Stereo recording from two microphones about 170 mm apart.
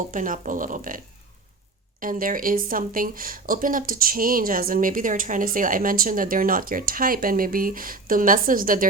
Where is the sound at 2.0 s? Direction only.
55° right (ahead or behind).